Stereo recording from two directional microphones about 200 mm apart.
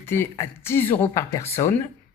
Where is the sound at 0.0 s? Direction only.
10° left (ahead or behind).